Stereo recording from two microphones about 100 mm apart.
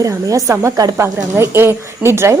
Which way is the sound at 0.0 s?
35° right (ahead or behind).